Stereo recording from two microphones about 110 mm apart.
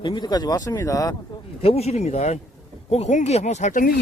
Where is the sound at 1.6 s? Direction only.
70° left (ahead or behind); by 3.7 s 90° left.